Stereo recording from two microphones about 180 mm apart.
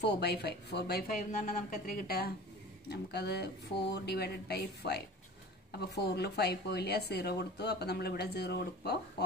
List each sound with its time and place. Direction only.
0.0 s speech: 65° left (ahead or behind)
2.9 s speech: 65° left (ahead or behind)